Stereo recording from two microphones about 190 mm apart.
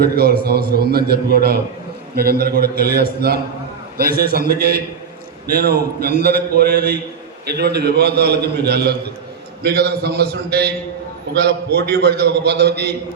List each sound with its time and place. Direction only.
0.0 s a man's voice: 55° right (ahead or behind)